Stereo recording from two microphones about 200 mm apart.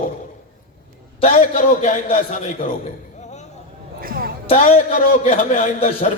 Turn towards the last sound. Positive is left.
turn(degrees=35)  # may be behind; listen again after turning